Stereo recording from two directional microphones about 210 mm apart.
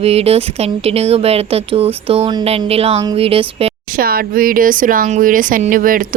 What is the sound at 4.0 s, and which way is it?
Speech, 45° right (ahead or behind).